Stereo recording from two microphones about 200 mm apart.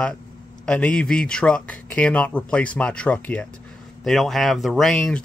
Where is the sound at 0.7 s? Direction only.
5° left (ahead or behind).